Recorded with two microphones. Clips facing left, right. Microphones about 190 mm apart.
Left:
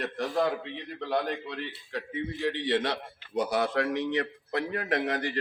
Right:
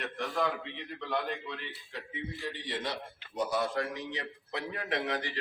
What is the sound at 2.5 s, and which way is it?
A man's voice, 75° left (ahead or behind).